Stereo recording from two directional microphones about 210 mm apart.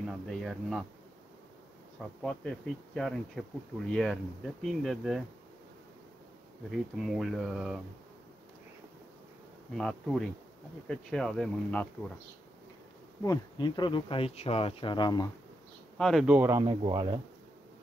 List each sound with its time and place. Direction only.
0.3 s speech: centre (ahead or behind)
2.2 s speech: 5° left (ahead or behind)
7.0 s speech: centre (ahead or behind)
9.8 s speech: centre (ahead or behind)
13.2 s speech: 20° left (ahead or behind)
16.0 s speech: centre (ahead or behind); by 17.2 s 20° right (ahead or behind)